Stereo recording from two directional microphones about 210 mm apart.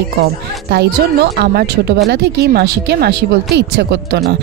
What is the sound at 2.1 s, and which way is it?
A woman's voice, 50° right (ahead or behind).